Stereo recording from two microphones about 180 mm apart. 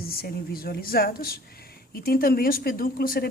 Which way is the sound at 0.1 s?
55° left (ahead or behind).